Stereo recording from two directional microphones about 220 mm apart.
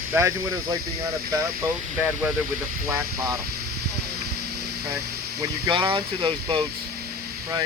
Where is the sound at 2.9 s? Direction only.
15° right (ahead or behind).